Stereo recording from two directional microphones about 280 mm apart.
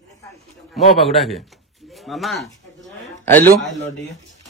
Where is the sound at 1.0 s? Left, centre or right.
Centre.